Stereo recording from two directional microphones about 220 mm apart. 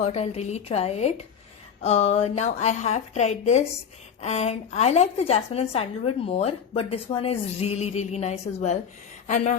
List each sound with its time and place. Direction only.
0.0 s a woman's voice: 30° left (ahead or behind)